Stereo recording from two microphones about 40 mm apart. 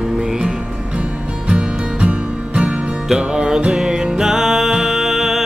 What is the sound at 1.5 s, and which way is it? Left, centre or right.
Music, right.